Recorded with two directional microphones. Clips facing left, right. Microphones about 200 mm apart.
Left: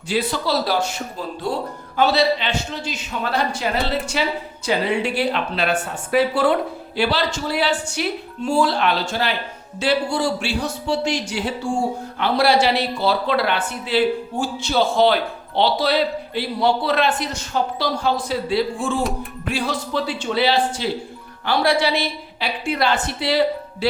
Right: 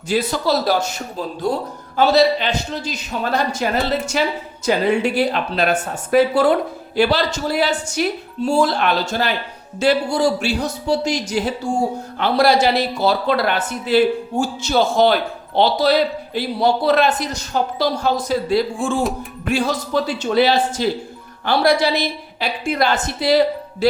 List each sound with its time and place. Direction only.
0.1 s a woman's voice: 45° right (ahead or behind)